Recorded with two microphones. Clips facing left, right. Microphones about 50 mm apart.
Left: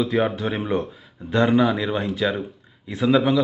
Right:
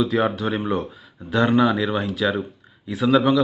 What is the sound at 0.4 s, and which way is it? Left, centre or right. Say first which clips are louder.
A man's voice: even; centre.